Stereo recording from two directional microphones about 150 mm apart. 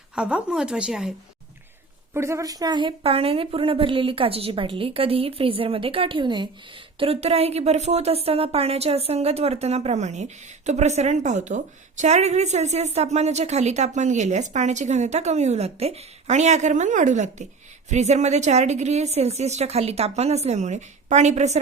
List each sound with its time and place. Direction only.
0.2 s speech: 5° right (ahead or behind)
2.1 s a woman's voice: 20° right (ahead or behind)
7.0 s a woman's voice: 40° right (ahead or behind)